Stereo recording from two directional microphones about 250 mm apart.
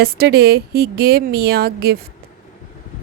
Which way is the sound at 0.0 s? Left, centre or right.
Right.